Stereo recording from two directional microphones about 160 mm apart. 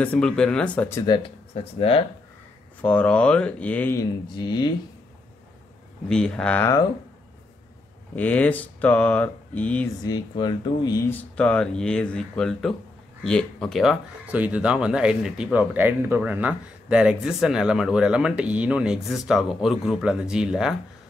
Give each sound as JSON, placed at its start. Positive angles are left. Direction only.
{"t": 0.0, "sound": "speech", "side_deg": 5}
{"t": 1.0, "sound": "speech", "side_deg": 30}
{"t": 1.5, "sound": "speech", "side_deg": 40}
{"t": 2.8, "sound": "speech", "side_deg": 10}
{"t": 4.4, "sound": "speech", "side_deg": 25}
{"t": 6.0, "sound": "speech", "side_deg": 5}
{"t": 8.2, "sound": "speech", "side_deg": 10}
{"t": 10.0, "sound": "speech", "side_deg": 25}
{"t": 11.1, "sound": "speech", "side_deg": 10}